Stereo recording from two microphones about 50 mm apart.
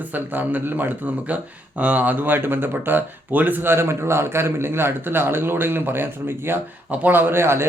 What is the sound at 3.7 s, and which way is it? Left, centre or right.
Speech, right.